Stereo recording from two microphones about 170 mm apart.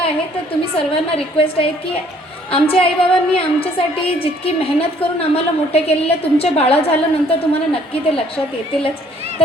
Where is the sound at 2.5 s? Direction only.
35° left (ahead or behind).